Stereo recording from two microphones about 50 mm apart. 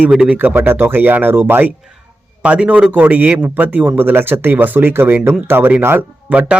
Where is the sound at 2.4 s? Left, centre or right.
Right.